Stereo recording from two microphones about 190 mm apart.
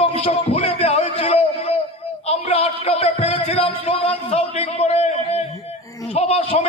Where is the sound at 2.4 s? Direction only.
30° left (ahead or behind).